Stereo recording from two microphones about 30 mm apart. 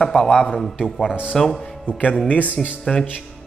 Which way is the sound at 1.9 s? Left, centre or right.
Left.